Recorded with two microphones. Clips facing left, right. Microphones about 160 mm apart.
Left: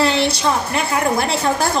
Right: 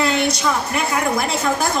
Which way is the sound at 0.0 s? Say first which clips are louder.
Left 2 dB; 30° left (ahead or behind).